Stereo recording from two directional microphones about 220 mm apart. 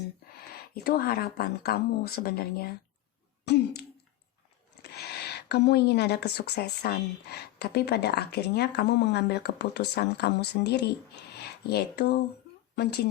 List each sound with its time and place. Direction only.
0.7 s a woman's voice: 45° left (ahead or behind)
3.4 s throat clearing: 50° left (ahead or behind)
4.8 s a woman's voice: 45° left (ahead or behind)